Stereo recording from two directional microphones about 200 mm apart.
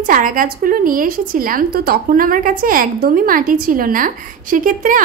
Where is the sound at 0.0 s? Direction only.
40° right (ahead or behind).